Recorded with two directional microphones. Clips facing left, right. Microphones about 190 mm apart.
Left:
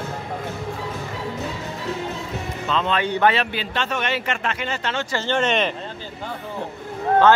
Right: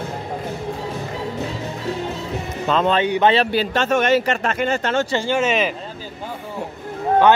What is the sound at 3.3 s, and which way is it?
A man's voice, 35° right (ahead or behind).